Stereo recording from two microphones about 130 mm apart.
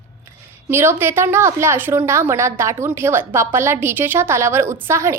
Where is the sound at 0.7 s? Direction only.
20° right (ahead or behind).